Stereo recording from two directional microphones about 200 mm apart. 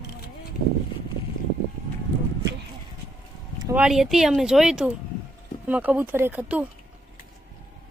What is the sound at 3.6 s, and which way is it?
A woman's voice, 5° right (ahead or behind).